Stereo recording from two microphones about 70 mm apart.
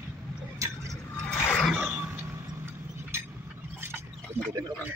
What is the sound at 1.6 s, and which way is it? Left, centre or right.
Throat clearing, centre.